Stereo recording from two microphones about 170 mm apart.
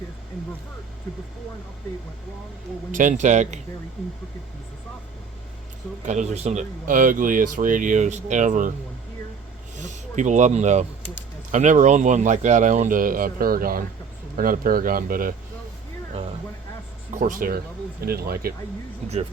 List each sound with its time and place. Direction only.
2.9 s speech: 50° right (ahead or behind)
6.1 s speech: 40° right (ahead or behind)
9.7 s speech: 45° right (ahead or behind)
17.1 s speech: 50° right (ahead or behind)
18.0 s speech: 65° right (ahead or behind)